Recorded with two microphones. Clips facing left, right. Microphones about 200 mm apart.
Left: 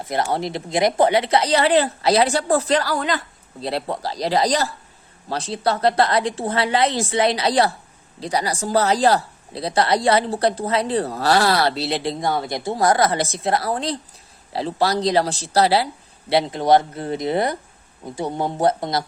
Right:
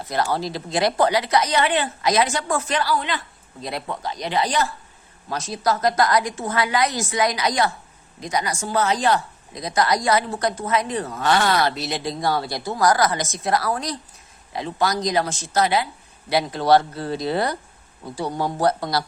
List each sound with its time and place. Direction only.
0.0 s speech: 20° left (ahead or behind)
16.3 s speech: 25° left (ahead or behind)